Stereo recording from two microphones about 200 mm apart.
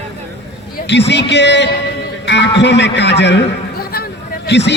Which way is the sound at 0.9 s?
60° left (ahead or behind).